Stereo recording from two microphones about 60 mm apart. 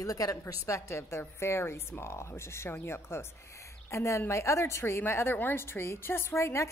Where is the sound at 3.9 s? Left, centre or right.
Left.